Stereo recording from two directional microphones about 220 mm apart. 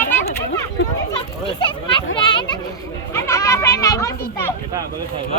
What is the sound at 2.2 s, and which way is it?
Children playing, 20° left (ahead or behind).